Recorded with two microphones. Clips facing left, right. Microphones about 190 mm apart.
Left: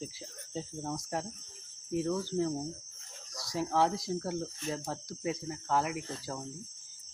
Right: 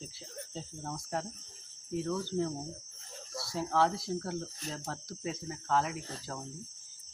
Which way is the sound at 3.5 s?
15° left (ahead or behind).